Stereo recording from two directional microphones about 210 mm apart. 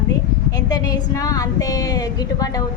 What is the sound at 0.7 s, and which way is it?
A woman's voice, 20° left (ahead or behind).